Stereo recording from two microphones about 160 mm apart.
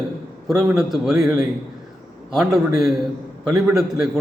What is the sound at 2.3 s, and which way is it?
Speech, centre (ahead or behind).